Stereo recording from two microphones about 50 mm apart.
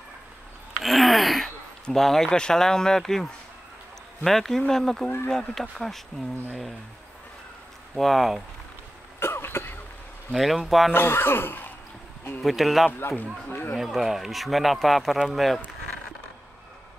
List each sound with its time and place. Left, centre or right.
0.8 s a sound: centre
1.9 s speech: centre
2.2 s speech: centre
7.9 s speech: centre
9.2 s cough: left
10.3 s speech: centre
10.9 s speech: left
12.4 s speech: centre
13.5 s speech: left
13.7 s speech: centre